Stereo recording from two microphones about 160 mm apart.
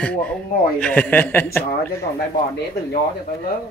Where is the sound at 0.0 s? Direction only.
5° left (ahead or behind).